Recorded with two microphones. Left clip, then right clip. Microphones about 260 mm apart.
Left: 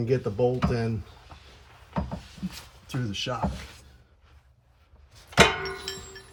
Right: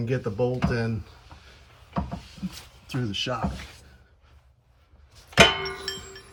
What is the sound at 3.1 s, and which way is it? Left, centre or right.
Speech, centre.